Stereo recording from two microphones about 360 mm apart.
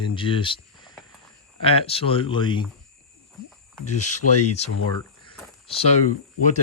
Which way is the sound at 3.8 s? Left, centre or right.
Left.